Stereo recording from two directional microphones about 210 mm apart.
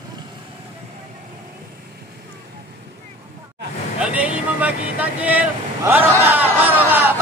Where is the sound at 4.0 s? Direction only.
5° right (ahead or behind).